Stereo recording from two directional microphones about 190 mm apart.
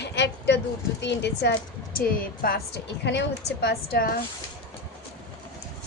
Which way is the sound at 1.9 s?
50° left (ahead or behind).